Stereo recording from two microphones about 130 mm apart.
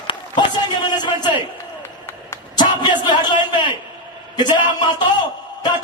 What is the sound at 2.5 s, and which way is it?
A man's voice, 35° left (ahead or behind).